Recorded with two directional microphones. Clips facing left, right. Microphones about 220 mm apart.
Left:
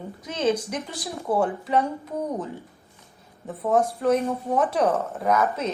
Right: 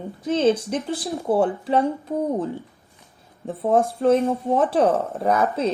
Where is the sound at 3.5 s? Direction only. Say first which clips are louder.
Right 3 dB; 30° right (ahead or behind).